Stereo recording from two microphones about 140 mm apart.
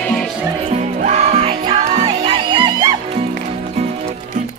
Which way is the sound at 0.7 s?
60° right (ahead or behind).